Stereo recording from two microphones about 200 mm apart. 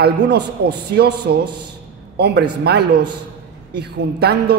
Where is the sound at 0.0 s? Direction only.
55° right (ahead or behind).